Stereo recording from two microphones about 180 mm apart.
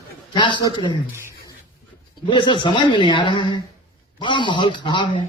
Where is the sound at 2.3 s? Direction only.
25° left (ahead or behind).